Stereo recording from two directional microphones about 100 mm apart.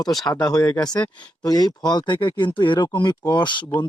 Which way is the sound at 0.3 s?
40° left (ahead or behind).